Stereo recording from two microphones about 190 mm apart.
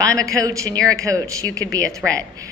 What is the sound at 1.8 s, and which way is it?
Speech, 5° left (ahead or behind).